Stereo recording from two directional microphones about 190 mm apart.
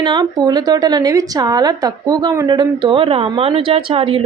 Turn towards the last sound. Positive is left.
turn(degrees=-30)  # may be behind; listen again after turning